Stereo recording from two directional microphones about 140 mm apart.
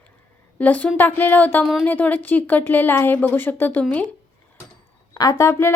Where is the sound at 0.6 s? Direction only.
10° left (ahead or behind).